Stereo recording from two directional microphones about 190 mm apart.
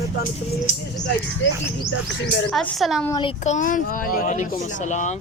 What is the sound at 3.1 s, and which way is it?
Speech, 25° left (ahead or behind).